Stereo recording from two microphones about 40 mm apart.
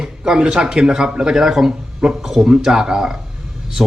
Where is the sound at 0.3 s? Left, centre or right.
Centre.